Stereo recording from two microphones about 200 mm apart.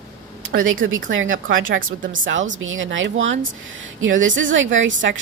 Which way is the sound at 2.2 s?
70° right (ahead or behind).